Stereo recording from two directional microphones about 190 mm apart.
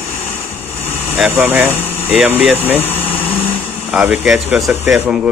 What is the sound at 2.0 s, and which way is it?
Speech, 10° right (ahead or behind).